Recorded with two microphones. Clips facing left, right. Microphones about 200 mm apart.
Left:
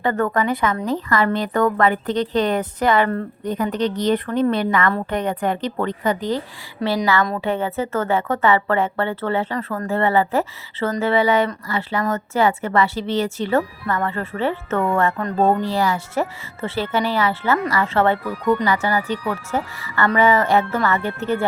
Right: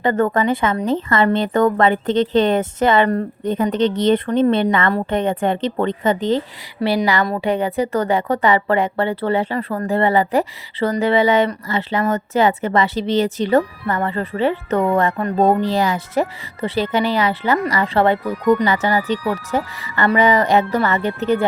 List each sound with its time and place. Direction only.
0.0 s a woman's voice: 20° right (ahead or behind)